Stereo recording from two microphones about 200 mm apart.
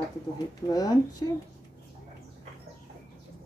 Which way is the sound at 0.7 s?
20° left (ahead or behind).